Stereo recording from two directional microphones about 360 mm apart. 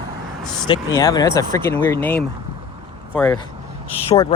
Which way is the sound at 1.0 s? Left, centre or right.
Centre.